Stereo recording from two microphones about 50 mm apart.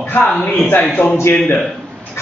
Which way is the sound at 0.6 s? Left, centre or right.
Left.